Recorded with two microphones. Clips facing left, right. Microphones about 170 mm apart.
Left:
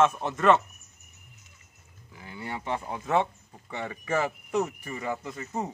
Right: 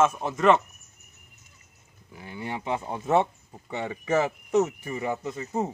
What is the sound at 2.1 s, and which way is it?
Speech, 20° right (ahead or behind).